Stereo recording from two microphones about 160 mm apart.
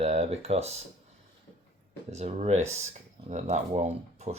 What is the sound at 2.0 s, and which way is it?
Speech, 40° right (ahead or behind).